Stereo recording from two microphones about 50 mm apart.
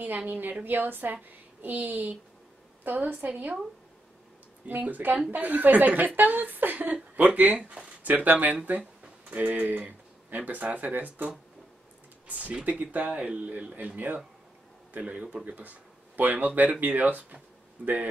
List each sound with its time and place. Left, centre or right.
0.3 s a woman's voice: right
4.6 s a woman's voice: right
15.4 s a woman's voice: right